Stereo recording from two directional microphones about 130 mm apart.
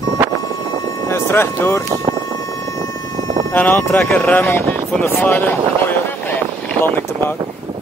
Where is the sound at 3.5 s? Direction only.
15° left (ahead or behind).